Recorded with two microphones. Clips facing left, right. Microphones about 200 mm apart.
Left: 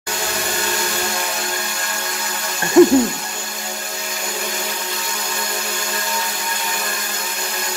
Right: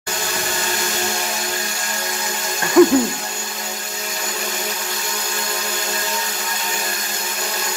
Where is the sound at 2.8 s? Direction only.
25° left (ahead or behind).